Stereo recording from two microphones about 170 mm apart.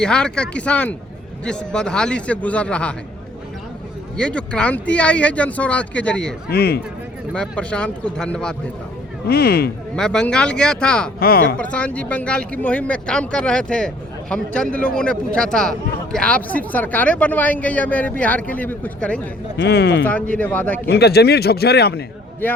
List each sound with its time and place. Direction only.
0.0 s speech: 5° left (ahead or behind)
4.2 s speech: 5° left (ahead or behind)
6.5 s a man's voice: 70° left (ahead or behind)
7.3 s speech: 5° left (ahead or behind)
9.2 s a man's voice: 65° left (ahead or behind)
9.9 s speech: 5° left (ahead or behind)
11.2 s speech: 65° left (ahead or behind)
11.5 s speech: 5° left (ahead or behind)
19.5 s speech: 90° left
20.1 s speech: 10° left (ahead or behind)
20.8 s a man's voice: 70° left (ahead or behind)
22.4 s speech: 10° left (ahead or behind)